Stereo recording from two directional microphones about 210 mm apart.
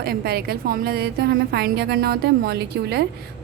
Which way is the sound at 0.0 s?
45° right (ahead or behind).